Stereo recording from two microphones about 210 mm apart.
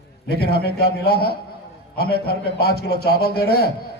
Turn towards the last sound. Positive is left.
turn(degrees=50)  # may be behind; listen again after turning